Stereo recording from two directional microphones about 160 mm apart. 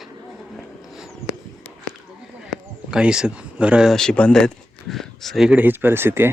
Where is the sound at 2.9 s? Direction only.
5° right (ahead or behind).